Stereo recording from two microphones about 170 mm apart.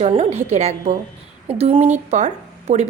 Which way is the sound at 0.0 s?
40° right (ahead or behind).